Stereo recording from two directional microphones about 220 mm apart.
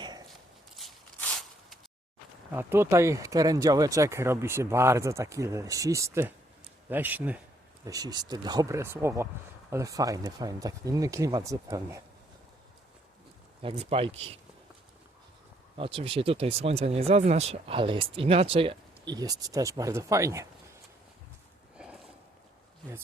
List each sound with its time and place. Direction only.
0.8 s a sound: centre (ahead or behind)
2.5 s speech: 10° right (ahead or behind)
13.6 s speech: 25° right (ahead or behind)
15.8 s speech: 25° right (ahead or behind)